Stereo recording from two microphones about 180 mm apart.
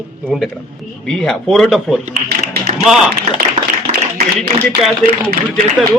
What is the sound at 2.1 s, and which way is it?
Speech, 60° right (ahead or behind).